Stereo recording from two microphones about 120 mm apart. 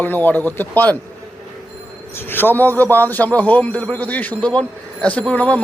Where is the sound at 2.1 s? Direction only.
15° left (ahead or behind).